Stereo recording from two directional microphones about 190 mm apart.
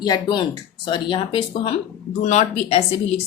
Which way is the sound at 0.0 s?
20° left (ahead or behind).